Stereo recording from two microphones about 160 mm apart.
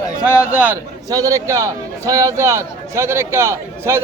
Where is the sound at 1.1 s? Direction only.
20° right (ahead or behind).